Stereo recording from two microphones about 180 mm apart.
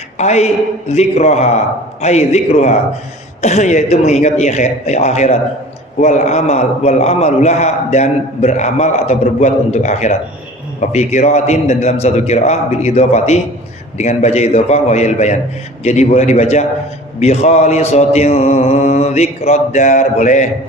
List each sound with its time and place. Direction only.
0.2 s a man's voice: 40° left (ahead or behind)